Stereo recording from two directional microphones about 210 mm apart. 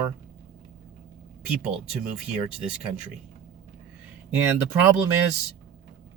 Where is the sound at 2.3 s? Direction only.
5° right (ahead or behind).